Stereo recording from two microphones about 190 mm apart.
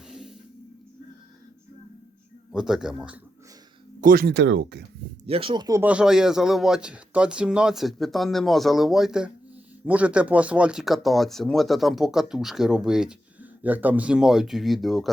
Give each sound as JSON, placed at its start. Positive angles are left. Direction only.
{"t": 0.1, "sound": "music", "side_deg": 0}
{"t": 2.5, "sound": "speech", "side_deg": -5}
{"t": 4.0, "sound": "speech", "side_deg": -50}
{"t": 5.2, "sound": "speech", "side_deg": -30}
{"t": 5.8, "sound": "speech", "side_deg": -5}